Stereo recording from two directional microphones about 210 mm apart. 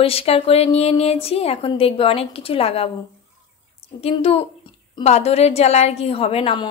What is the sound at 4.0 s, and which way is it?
A woman's voice, 30° left (ahead or behind).